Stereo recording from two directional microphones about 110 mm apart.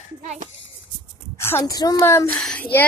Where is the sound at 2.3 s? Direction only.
10° left (ahead or behind).